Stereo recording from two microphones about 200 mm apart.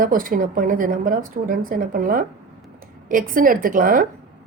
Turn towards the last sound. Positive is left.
turn(degrees=-45)  # may be behind; listen again after turning